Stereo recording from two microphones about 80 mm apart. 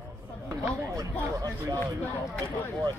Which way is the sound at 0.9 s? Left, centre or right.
Right.